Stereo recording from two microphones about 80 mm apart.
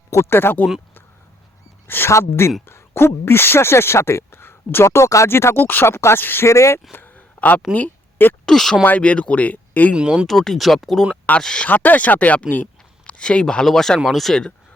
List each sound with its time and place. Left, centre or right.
0.1 s speech: left
1.9 s speech: left
6.9 s a sound: left
7.7 s speech: left
8.4 s speech: centre
8.8 s speech: centre
9.9 s speech: centre
10.2 s speech: centre
11.7 s speech: left; by 14.5 s centre